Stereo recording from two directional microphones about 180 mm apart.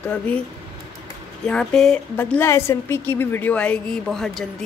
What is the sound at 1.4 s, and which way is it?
Speech, 5° left (ahead or behind).